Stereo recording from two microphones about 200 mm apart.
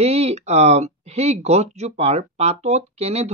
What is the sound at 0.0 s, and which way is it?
Speech, 30° right (ahead or behind).